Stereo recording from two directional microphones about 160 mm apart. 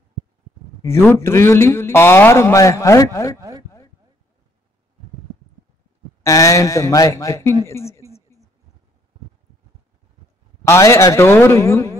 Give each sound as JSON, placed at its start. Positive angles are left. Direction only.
{"t": 0.8, "sound": "a man's voice", "side_deg": 15}
{"t": 3.3, "sound": "chopping", "side_deg": -20}
{"t": 6.2, "sound": "speech", "side_deg": 20}
{"t": 7.6, "sound": "a sound", "side_deg": 15}
{"t": 10.6, "sound": "a man's voice", "side_deg": 20}